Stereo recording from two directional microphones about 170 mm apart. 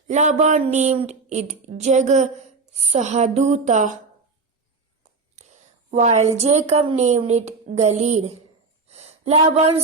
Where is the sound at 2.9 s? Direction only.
40° right (ahead or behind).